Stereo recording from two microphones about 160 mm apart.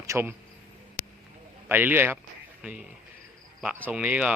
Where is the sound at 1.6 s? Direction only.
10° right (ahead or behind).